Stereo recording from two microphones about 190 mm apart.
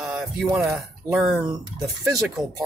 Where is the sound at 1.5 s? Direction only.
20° right (ahead or behind).